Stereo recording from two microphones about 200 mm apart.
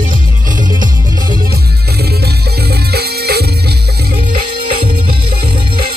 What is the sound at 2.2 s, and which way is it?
Music, 50° right (ahead or behind).